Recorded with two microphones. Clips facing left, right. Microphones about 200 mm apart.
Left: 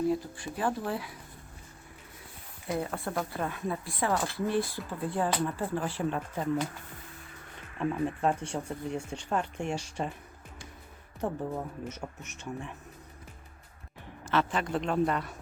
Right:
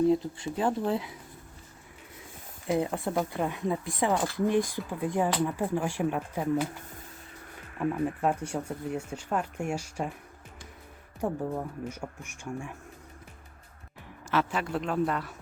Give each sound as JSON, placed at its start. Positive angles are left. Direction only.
{"t": 0.1, "sound": "speech", "side_deg": -20}
{"t": 2.6, "sound": "speech", "side_deg": -20}
{"t": 7.8, "sound": "speech", "side_deg": -5}
{"t": 11.2, "sound": "speech", "side_deg": -10}
{"t": 14.3, "sound": "a man's voice", "side_deg": -5}